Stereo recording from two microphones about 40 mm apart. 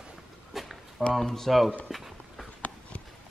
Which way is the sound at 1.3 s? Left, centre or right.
Centre.